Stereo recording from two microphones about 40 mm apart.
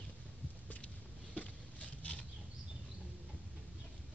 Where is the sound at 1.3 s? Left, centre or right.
Left.